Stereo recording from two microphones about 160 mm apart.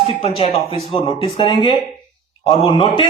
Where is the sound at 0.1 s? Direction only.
40° left (ahead or behind).